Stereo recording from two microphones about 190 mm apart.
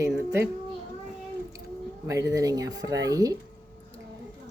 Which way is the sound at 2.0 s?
15° right (ahead or behind).